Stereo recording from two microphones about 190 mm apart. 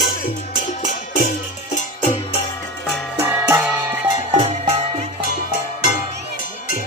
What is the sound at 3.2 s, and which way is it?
Music, 10° right (ahead or behind).